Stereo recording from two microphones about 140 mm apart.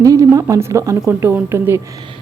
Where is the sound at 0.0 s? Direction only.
25° right (ahead or behind).